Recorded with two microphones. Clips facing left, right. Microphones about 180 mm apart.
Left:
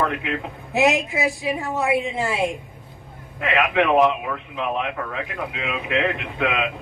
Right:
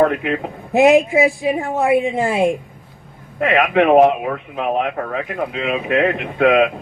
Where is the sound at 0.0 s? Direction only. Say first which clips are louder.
Right 8 dB; 50° right (ahead or behind).